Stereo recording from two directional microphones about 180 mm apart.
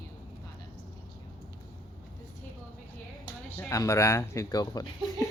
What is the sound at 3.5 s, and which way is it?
Speech, 15° left (ahead or behind).